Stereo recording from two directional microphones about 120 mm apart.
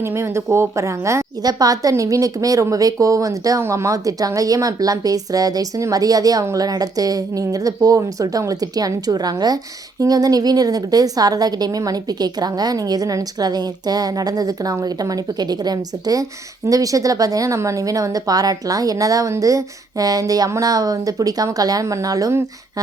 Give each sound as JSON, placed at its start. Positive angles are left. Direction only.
{"t": 0.0, "sound": "a woman's voice", "side_deg": -20}